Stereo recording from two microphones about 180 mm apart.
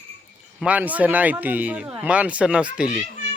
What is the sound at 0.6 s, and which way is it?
Speech, 10° right (ahead or behind).